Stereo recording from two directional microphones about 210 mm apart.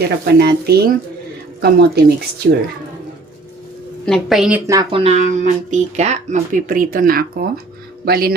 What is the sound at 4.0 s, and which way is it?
Speech, centre (ahead or behind).